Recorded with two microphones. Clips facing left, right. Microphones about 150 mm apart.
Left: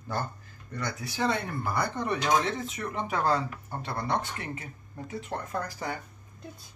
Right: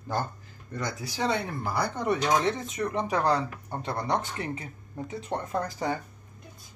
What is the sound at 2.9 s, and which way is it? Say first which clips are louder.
Speech: right 2 dB; 20° right (ahead or behind).